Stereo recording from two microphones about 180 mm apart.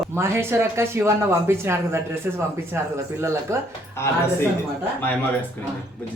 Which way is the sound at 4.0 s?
15° left (ahead or behind).